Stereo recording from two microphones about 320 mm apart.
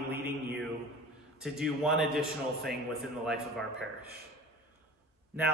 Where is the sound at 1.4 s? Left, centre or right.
Centre.